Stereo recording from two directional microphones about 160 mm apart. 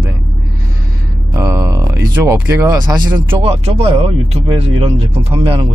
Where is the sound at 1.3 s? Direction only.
20° right (ahead or behind).